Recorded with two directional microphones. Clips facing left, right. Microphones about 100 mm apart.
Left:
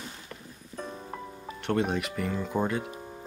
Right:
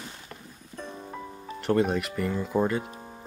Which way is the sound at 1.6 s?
Centre (ahead or behind).